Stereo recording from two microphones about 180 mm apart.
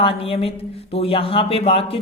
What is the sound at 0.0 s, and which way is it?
Speech, 30° left (ahead or behind).